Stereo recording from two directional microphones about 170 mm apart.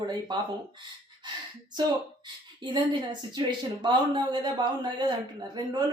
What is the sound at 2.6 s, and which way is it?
A woman's voice, 25° right (ahead or behind).